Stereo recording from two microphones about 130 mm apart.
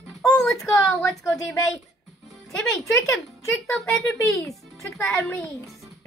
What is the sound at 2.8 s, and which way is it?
Speech, 25° left (ahead or behind).